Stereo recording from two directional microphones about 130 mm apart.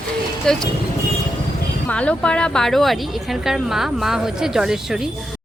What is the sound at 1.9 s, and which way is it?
Speech, 10° left (ahead or behind).